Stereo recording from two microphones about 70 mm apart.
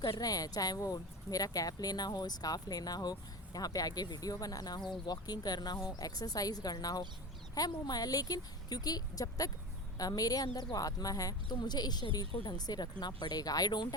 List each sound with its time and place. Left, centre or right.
0.0 s speech: left
5.8 s a woman's voice: left